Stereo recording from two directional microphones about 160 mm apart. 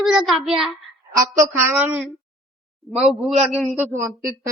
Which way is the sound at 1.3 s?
10° right (ahead or behind).